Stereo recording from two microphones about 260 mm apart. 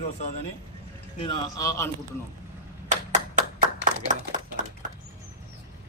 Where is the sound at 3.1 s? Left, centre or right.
Right.